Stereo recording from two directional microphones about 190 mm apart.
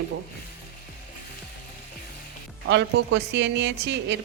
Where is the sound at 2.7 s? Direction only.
65° right (ahead or behind).